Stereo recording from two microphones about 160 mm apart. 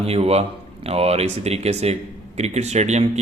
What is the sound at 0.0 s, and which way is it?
Speech, 40° right (ahead or behind).